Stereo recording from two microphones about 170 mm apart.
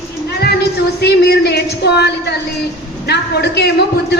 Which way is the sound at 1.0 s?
75° left (ahead or behind).